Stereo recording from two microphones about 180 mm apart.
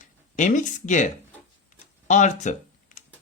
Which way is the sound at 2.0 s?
40° left (ahead or behind).